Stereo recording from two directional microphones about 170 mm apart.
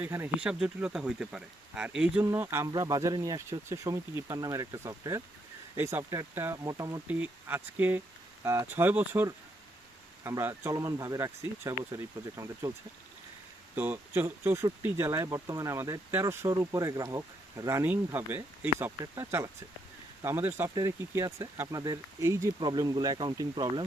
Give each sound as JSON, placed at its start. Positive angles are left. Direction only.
{"t": 0.0, "sound": "speech", "side_deg": -10}